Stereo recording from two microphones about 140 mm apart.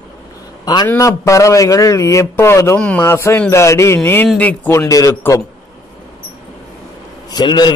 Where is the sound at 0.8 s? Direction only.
20° left (ahead or behind).